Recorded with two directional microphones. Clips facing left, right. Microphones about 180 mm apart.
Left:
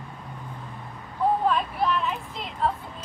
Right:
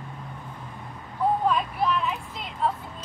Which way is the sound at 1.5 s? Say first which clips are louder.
Even; centre (ahead or behind).